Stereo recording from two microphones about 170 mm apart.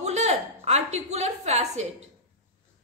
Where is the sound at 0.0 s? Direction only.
40° right (ahead or behind).